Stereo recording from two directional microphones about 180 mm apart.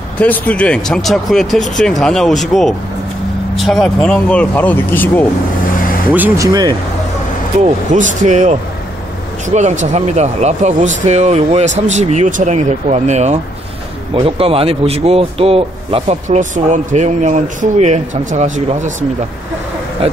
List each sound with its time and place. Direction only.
0.2 s speech: 10° left (ahead or behind)
6.1 s speech: 15° right (ahead or behind)
7.6 s speech: 40° right (ahead or behind)